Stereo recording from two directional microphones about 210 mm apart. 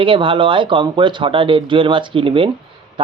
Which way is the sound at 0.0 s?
25° right (ahead or behind).